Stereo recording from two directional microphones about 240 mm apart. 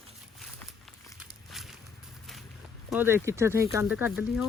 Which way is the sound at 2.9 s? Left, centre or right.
Centre.